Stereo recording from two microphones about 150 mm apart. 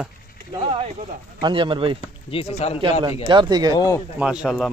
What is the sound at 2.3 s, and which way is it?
Speech, 40° left (ahead or behind).